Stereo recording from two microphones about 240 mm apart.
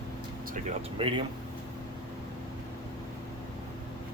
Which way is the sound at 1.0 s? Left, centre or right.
Right.